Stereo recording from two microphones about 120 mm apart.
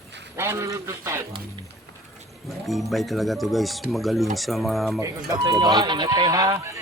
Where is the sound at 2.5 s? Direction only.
Centre (ahead or behind).